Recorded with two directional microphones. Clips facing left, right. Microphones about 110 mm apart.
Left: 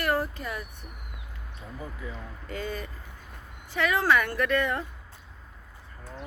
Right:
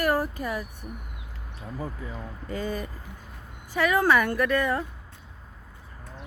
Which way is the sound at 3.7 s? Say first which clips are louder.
Right 2 dB; 15° right (ahead or behind).